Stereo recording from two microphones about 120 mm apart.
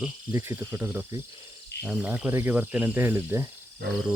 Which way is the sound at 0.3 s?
20° right (ahead or behind).